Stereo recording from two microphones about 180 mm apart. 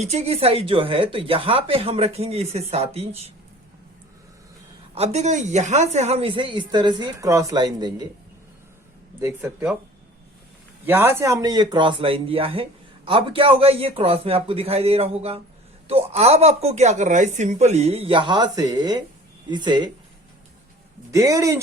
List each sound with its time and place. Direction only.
0.0 s a woman's voice: 35° right (ahead or behind)
4.9 s speech: 40° right (ahead or behind); by 8.0 s 25° right (ahead or behind)
9.2 s speech: 10° right (ahead or behind)
10.8 s a woman's voice: 10° right (ahead or behind)
21.1 s speech: 20° right (ahead or behind)